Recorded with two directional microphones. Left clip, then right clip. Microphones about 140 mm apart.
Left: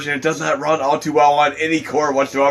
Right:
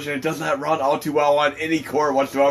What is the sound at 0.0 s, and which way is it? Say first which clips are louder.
A man's voice: left 5 dB; 40° left (ahead or behind).